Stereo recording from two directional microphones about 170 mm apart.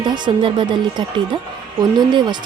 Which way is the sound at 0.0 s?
25° right (ahead or behind).